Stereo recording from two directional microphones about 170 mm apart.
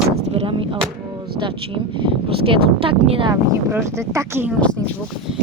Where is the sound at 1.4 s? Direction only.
30° right (ahead or behind).